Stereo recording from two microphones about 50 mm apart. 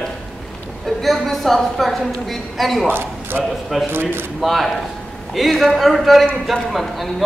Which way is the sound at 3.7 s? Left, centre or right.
Centre.